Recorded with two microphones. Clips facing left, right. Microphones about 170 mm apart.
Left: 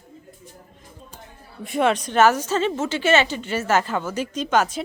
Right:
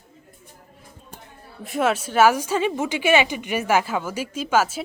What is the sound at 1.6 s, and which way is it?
A woman's voice, centre (ahead or behind).